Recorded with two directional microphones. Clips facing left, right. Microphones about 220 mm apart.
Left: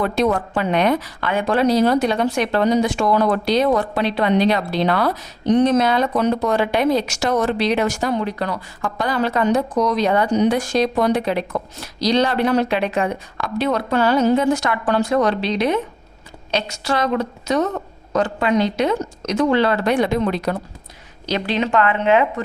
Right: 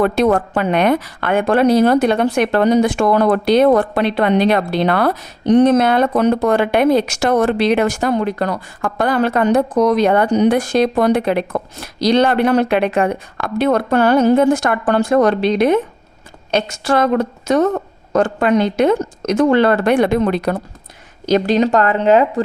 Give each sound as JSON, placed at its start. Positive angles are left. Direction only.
{"t": 0.0, "sound": "a woman's voice", "side_deg": -55}